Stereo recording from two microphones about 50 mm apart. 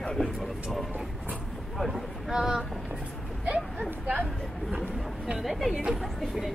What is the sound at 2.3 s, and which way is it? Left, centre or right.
Vehicle, centre.